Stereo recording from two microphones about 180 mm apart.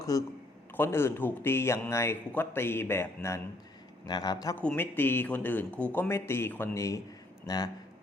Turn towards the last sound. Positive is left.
turn(degrees=20)  # may be behind; listen again after turning